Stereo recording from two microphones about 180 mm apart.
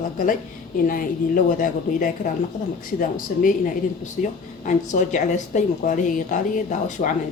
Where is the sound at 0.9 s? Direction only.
50° left (ahead or behind).